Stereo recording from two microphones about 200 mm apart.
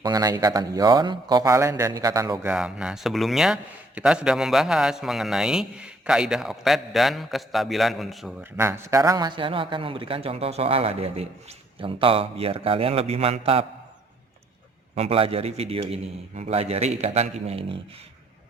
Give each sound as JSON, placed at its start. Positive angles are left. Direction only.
{"t": 0.0, "sound": "a man's voice", "side_deg": -20}
{"t": 2.5, "sound": "a man's voice", "side_deg": -5}
{"t": 8.5, "sound": "a man's voice", "side_deg": -15}
{"t": 14.9, "sound": "a man's voice", "side_deg": -30}